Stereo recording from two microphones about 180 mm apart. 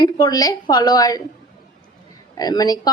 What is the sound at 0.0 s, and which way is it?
A woman's voice, 20° left (ahead or behind).